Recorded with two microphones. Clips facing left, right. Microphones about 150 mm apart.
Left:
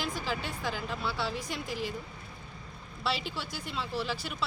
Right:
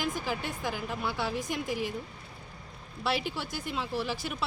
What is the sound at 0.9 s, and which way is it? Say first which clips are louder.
Speech: right 2 dB; 15° right (ahead or behind).